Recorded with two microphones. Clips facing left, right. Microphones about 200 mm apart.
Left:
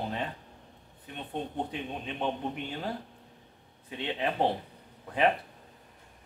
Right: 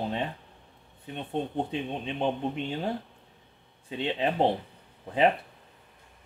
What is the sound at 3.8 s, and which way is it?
Speech, 25° right (ahead or behind).